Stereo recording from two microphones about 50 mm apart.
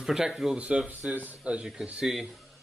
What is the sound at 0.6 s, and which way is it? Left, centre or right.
Speech, right.